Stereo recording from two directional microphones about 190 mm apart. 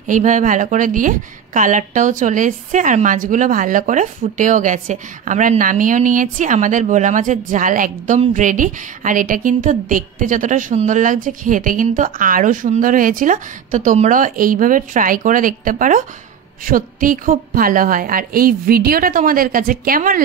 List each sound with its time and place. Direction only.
0.0 s a woman's voice: 40° right (ahead or behind)